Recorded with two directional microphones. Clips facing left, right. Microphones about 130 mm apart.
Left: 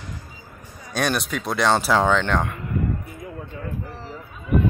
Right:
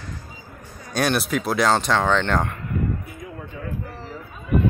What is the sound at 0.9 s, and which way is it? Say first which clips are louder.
Speech: right 2 dB; 5° right (ahead or behind).